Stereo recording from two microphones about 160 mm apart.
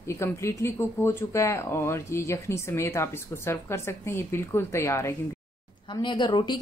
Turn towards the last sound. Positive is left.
turn(degrees=30)  # may be behind; listen again after turning